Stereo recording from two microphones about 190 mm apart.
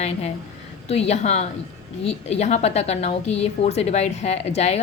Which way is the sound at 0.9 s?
35° left (ahead or behind).